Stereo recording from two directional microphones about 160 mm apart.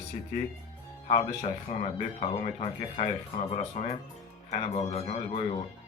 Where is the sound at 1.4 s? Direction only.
40° left (ahead or behind).